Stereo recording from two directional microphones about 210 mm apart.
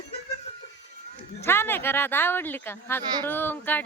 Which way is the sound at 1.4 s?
10° left (ahead or behind).